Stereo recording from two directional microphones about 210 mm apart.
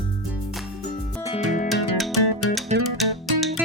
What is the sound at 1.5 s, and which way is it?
Music, 40° left (ahead or behind).